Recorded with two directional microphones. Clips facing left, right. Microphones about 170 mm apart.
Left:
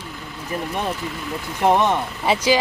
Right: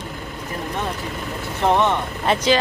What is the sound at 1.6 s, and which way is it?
Speech, 10° left (ahead or behind).